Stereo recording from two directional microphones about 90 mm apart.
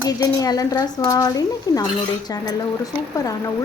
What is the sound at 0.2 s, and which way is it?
Speech, 45° left (ahead or behind).